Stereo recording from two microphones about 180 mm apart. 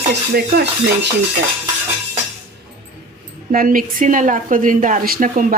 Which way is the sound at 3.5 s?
50° right (ahead or behind).